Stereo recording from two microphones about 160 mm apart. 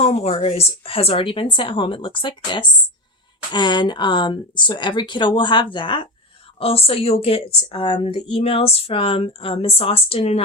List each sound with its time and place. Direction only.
0.0 s a woman's voice: 40° left (ahead or behind)